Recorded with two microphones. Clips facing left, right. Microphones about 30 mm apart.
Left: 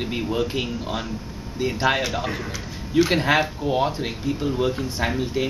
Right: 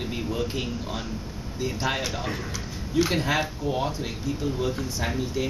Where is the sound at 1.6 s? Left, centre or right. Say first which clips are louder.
Left 6 dB; left.